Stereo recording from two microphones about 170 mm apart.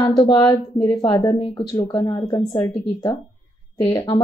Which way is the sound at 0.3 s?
25° left (ahead or behind).